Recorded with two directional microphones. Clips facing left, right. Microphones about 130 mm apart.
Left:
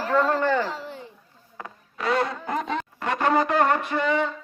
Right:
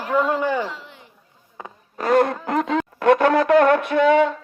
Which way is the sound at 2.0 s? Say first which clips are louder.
Right 7 dB; 50° right (ahead or behind).